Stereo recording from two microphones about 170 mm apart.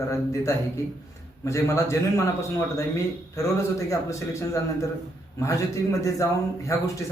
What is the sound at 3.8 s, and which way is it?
A man's voice, 20° left (ahead or behind).